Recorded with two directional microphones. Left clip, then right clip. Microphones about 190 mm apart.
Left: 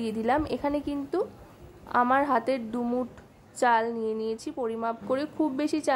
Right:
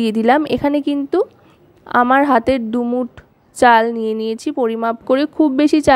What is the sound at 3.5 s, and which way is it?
A woman's voice, 40° right (ahead or behind).